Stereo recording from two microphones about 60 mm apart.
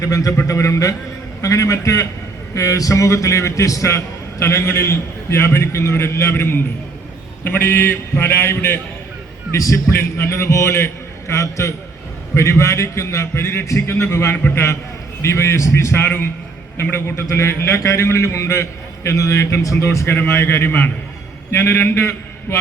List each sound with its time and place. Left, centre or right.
0.0 s a man's voice: left
9.6 s a man's voice: left
9.9 s a man's voice: left
16.0 s a man's voice: left
19.8 s a man's voice: left
20.1 s a man's voice: left